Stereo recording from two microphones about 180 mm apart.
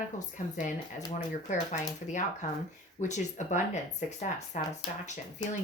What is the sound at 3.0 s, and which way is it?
Speech, 40° left (ahead or behind).